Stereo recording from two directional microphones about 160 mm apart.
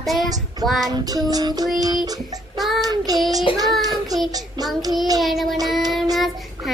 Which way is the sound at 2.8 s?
25° right (ahead or behind).